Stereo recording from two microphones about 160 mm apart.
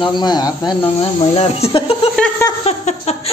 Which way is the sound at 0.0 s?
25° left (ahead or behind).